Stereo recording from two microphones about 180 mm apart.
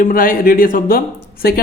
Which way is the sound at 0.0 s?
50° left (ahead or behind).